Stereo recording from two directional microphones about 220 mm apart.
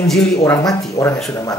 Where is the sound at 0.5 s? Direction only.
15° left (ahead or behind).